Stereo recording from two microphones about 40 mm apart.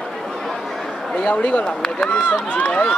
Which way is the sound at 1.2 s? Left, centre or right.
Left.